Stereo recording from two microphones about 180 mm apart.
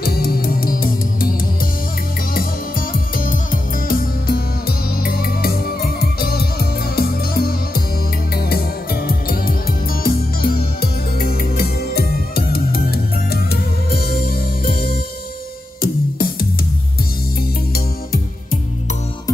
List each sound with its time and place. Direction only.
0.0 s music: 55° left (ahead or behind)
2.9 s music: 50° left (ahead or behind)
17.7 s music: 55° left (ahead or behind)